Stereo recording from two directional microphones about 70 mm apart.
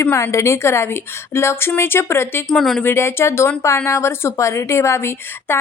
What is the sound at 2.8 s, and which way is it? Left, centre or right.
A woman's voice, left.